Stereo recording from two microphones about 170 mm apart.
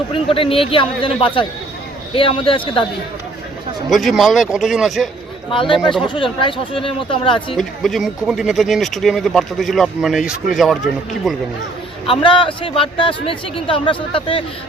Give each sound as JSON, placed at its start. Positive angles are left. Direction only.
{"t": 0.1, "sound": "speech", "side_deg": 30}
{"t": 3.8, "sound": "speech", "side_deg": 0}
{"t": 6.0, "sound": "speech", "side_deg": 30}
{"t": 7.5, "sound": "speech", "side_deg": 0}
{"t": 12.0, "sound": "speech", "side_deg": 30}